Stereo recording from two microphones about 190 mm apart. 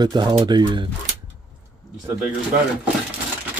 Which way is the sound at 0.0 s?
20° right (ahead or behind).